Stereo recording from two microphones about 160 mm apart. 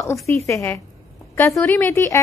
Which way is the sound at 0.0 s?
20° left (ahead or behind).